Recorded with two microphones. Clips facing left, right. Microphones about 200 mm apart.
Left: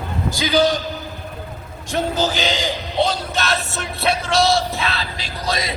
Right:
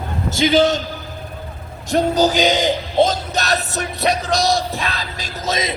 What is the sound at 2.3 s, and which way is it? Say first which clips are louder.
Speech: right 6 dB; 20° right (ahead or behind).